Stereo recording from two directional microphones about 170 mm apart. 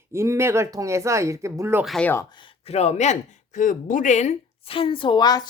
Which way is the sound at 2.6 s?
40° left (ahead or behind).